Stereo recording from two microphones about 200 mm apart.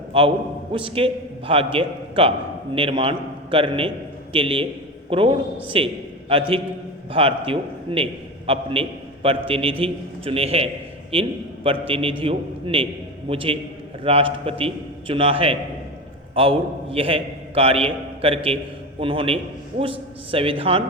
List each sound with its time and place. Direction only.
0.1 s a man's voice: 25° right (ahead or behind)